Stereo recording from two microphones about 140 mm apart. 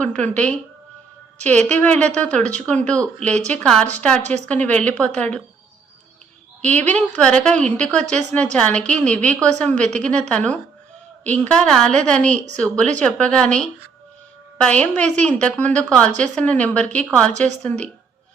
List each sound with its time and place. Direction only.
0.0 s a woman's voice: 10° left (ahead or behind)
2.4 s speech: 55° right (ahead or behind)
2.6 s a woman's voice: 10° left (ahead or behind)
6.6 s a woman's voice: 10° left (ahead or behind)